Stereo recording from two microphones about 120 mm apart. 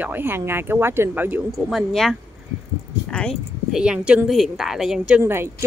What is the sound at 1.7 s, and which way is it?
Speech, centre (ahead or behind).